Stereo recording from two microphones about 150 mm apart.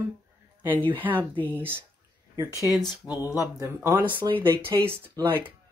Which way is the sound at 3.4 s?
20° right (ahead or behind).